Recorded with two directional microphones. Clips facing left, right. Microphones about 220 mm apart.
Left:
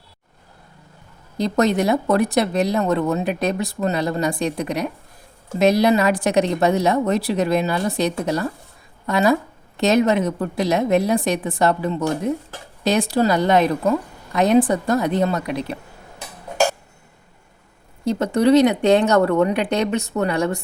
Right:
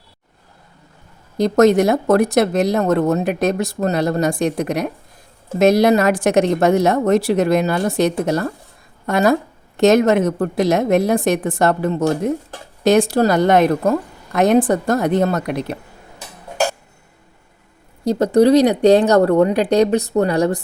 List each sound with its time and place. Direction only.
1.4 s speech: 45° right (ahead or behind)
18.0 s speech: 35° right (ahead or behind)